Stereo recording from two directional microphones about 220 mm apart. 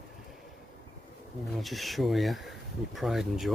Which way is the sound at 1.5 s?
Centre (ahead or behind).